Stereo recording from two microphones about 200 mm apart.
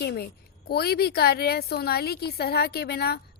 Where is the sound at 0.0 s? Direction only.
50° left (ahead or behind).